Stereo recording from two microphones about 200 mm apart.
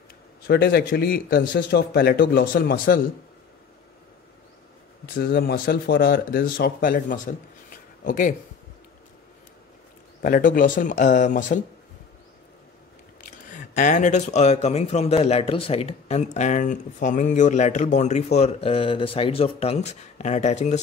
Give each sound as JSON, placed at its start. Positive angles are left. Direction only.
{"t": 0.5, "sound": "speech", "side_deg": 55}
{"t": 5.0, "sound": "speech", "side_deg": 50}
{"t": 10.2, "sound": "speech", "side_deg": 45}
{"t": 13.2, "sound": "speech", "side_deg": 40}